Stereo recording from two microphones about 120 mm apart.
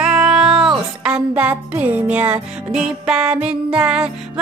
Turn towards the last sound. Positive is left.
turn(degrees=-5)  # may be behind; listen again after turning